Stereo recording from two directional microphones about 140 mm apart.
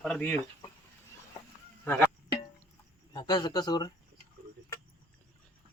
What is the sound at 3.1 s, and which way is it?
Speech, 30° left (ahead or behind).